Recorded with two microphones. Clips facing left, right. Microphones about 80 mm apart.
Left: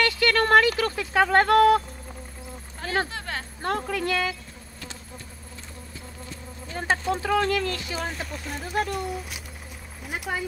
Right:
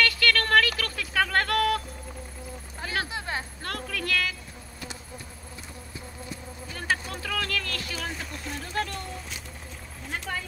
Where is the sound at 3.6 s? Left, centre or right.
Left.